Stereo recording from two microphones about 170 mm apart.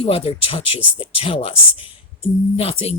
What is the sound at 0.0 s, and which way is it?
Speech, 35° left (ahead or behind).